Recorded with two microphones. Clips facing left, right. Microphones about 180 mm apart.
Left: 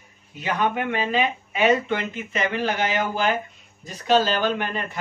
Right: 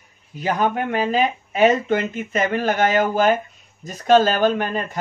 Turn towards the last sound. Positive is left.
turn(degrees=-40)  # may be behind; listen again after turning